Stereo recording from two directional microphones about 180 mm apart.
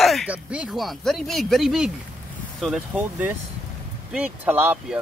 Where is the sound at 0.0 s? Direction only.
Centre (ahead or behind).